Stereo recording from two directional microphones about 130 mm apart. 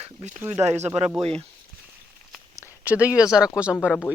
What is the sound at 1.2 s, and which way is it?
Speech, 50° right (ahead or behind).